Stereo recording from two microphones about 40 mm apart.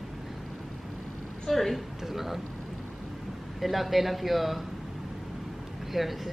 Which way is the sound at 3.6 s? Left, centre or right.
Centre.